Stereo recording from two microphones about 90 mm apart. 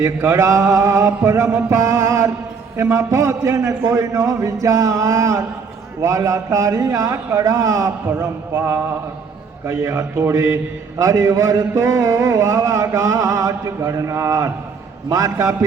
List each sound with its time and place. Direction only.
0.0 s a man's voice: 35° right (ahead or behind)